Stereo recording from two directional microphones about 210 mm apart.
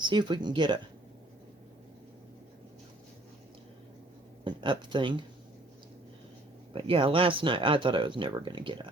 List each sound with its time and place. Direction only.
0.0 s speech: 20° right (ahead or behind)
4.4 s speech: 20° right (ahead or behind)
6.7 s speech: 25° right (ahead or behind)